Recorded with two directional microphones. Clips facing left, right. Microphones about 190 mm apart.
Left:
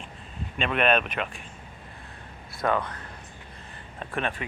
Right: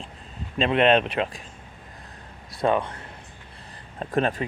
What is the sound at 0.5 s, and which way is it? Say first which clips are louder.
Speech: right 5 dB; 30° right (ahead or behind).